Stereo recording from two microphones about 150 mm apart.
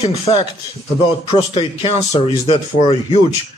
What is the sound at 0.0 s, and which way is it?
Speech, 45° left (ahead or behind).